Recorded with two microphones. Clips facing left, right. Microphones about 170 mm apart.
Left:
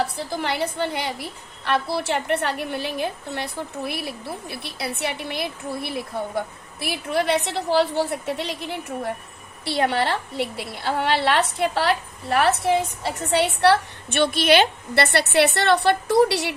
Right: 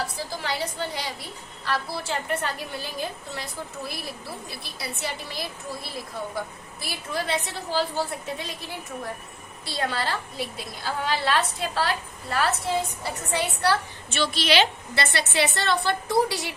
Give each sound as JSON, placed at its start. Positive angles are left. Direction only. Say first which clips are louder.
{"t": 0.3, "sound": "a woman's voice", "louder": "left 5 dB", "side_deg": 60}
{"t": 9.6, "sound": "a woman's voice", "louder": "left 7 dB", "side_deg": 65}